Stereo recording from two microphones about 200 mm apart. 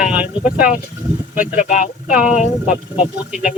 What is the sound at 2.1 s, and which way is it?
Speech, 5° right (ahead or behind).